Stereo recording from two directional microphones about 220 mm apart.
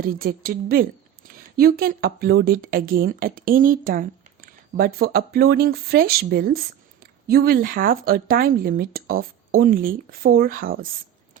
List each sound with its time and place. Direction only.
0.0 s a woman's voice: 40° right (ahead or behind)